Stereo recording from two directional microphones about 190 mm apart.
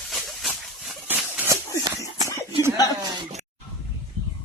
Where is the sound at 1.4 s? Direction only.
15° right (ahead or behind).